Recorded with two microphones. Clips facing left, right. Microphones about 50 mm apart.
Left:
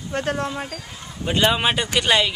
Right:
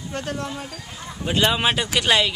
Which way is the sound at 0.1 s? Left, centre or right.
Left.